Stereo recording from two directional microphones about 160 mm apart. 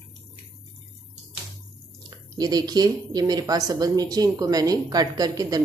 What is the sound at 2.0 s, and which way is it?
Speech, 25° right (ahead or behind).